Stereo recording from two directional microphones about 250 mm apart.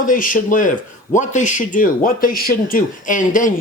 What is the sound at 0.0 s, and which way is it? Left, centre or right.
Speech, left.